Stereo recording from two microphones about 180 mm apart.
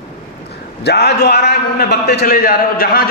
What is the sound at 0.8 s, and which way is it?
A man's voice, 70° left (ahead or behind).